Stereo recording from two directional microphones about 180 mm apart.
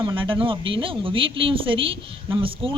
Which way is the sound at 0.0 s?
30° right (ahead or behind).